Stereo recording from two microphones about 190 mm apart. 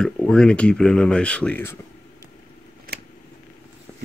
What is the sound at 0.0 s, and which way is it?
Speech, 5° left (ahead or behind).